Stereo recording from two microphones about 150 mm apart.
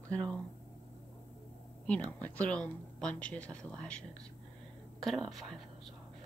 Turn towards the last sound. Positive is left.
turn(degrees=0)  # may be behind; listen again after turning